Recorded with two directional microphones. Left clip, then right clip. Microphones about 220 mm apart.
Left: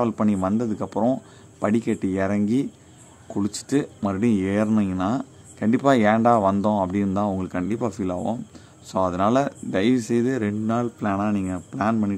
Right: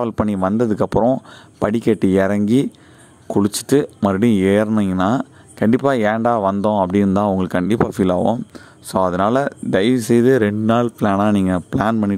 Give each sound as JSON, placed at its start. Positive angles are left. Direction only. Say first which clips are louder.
{"t": 0.0, "sound": "speech", "louder": "right 4 dB", "side_deg": -40}